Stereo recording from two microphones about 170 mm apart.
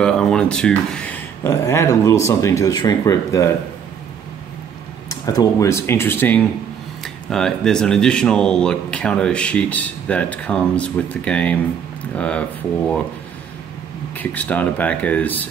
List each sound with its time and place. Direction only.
0.0 s speech: 5° left (ahead or behind)
5.1 s speech: 20° left (ahead or behind); by 13.0 s 5° left (ahead or behind)
14.1 s speech: 10° left (ahead or behind)